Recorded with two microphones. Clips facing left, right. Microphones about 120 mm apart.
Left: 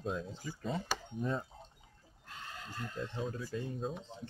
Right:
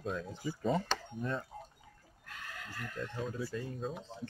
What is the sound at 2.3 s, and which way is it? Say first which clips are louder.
Neigh: even; 25° left (ahead or behind).